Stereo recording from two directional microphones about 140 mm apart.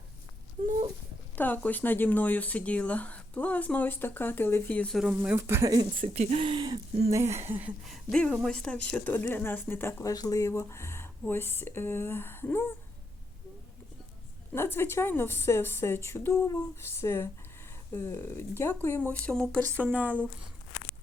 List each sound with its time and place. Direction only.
1.4 s speech: 10° left (ahead or behind)
4.9 s speech: 5° right (ahead or behind)
6.1 s speech: 45° right (ahead or behind)
7.2 s speech: 20° right (ahead or behind)
7.6 s speech: centre (ahead or behind); by 12.6 s 15° left (ahead or behind)
14.5 s speech: 15° left (ahead or behind)
19.8 s speech: 10° right (ahead or behind)